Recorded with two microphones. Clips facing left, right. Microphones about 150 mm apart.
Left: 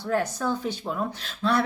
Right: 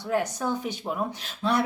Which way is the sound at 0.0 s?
20° right (ahead or behind).